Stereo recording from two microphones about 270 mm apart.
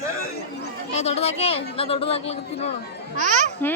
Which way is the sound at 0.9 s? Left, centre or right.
Left.